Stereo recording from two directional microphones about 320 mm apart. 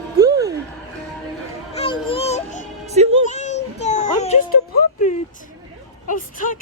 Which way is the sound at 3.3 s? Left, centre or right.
Left.